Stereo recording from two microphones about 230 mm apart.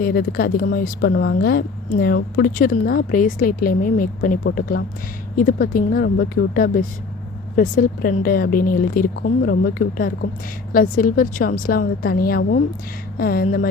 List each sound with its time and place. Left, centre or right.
0.0 s speech: left